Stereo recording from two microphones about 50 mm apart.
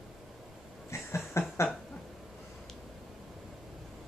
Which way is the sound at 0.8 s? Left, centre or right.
Left.